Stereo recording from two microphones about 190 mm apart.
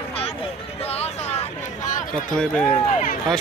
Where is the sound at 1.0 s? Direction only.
35° left (ahead or behind).